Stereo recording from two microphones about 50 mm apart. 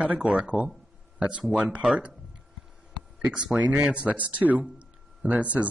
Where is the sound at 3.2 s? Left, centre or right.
Centre.